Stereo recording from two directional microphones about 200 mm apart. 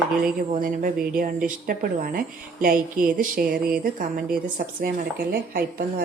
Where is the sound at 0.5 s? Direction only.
45° right (ahead or behind).